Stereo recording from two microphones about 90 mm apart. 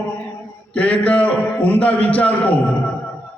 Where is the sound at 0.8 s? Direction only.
15° left (ahead or behind).